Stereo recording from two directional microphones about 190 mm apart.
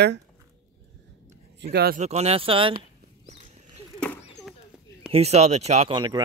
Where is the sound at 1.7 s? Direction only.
55° right (ahead or behind).